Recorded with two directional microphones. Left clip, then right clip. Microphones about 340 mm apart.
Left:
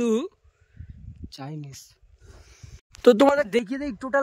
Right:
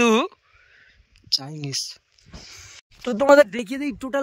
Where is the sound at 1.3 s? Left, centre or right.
Centre.